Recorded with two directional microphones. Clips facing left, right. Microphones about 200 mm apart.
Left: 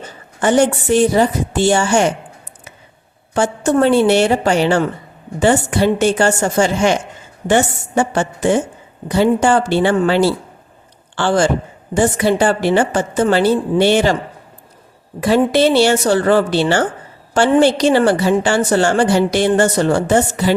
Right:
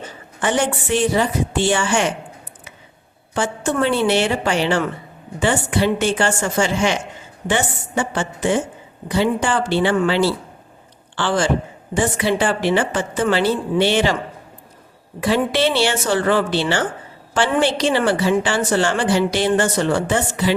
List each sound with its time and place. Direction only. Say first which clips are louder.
0.4 s a woman's voice: left 7 dB; 40° left (ahead or behind)
3.3 s a woman's voice: left 6 dB; 45° left (ahead or behind)
15.2 s a woman's voice: left 5 dB; 40° left (ahead or behind)